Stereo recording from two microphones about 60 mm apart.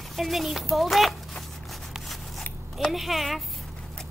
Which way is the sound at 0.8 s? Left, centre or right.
Centre.